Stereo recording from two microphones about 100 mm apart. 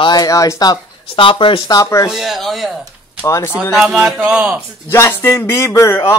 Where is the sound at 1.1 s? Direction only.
60° left (ahead or behind).